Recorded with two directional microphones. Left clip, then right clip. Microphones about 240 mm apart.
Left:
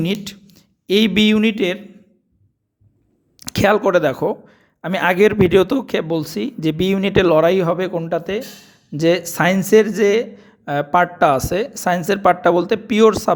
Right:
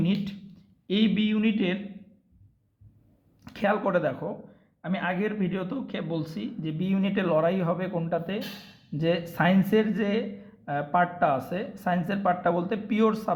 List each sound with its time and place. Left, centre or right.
0.0 s a man's voice: left
3.4 s a man's voice: left